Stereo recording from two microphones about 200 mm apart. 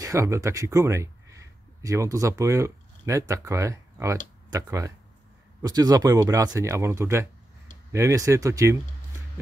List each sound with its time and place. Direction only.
0.0 s speech: 15° right (ahead or behind)